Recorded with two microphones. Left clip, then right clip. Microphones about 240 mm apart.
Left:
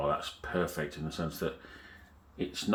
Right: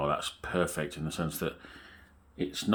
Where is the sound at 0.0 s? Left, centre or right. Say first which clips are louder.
Right 1 dB; right.